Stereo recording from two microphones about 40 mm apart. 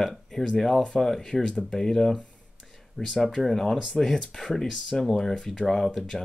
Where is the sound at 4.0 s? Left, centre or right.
Centre.